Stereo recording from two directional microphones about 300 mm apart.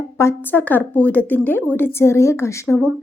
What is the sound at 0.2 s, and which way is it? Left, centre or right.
A woman's voice, centre.